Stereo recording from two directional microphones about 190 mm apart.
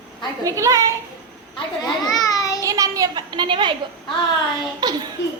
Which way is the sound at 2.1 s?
20° left (ahead or behind).